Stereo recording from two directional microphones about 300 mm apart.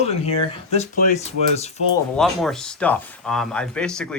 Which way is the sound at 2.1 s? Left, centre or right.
Centre.